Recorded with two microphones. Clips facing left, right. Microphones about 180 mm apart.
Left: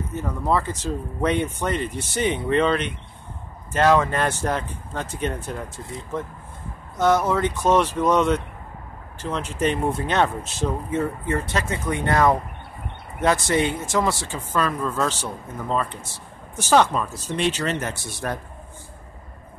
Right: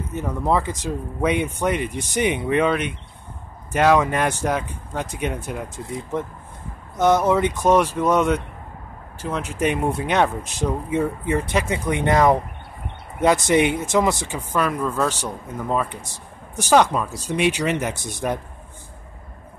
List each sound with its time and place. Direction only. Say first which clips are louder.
0.1 s speech: right 2 dB; 15° right (ahead or behind)
7.0 s speech: right 2 dB; 20° right (ahead or behind)